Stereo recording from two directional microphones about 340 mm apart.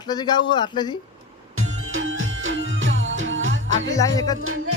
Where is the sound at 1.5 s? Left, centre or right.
Right.